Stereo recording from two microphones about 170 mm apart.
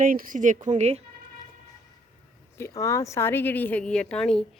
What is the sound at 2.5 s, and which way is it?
A woman's voice, 15° left (ahead or behind).